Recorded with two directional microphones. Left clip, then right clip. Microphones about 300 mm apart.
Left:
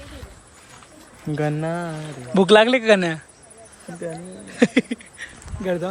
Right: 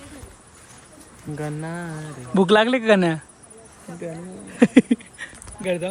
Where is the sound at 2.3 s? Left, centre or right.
Centre.